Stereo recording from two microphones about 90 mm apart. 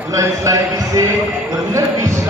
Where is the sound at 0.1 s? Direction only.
40° right (ahead or behind).